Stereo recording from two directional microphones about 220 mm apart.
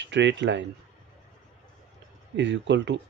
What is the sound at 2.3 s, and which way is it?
Speech, 55° right (ahead or behind).